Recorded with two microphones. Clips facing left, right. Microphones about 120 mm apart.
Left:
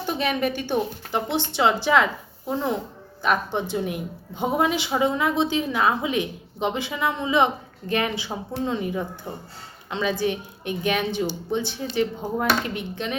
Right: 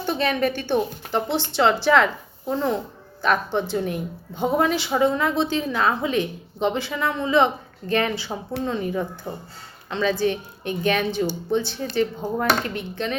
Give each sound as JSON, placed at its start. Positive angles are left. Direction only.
{"t": 0.0, "sound": "a woman's voice", "side_deg": 10}